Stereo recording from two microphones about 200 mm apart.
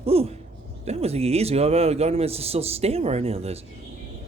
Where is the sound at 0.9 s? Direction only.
30° right (ahead or behind).